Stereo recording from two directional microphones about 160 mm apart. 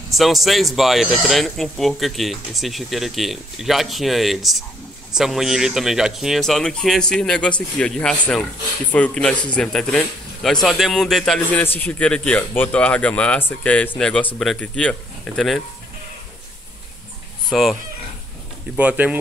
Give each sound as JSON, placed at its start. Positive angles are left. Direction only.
{"t": 0.1, "sound": "speech", "side_deg": 0}
{"t": 17.5, "sound": "speech", "side_deg": 0}
{"t": 18.8, "sound": "speech", "side_deg": -10}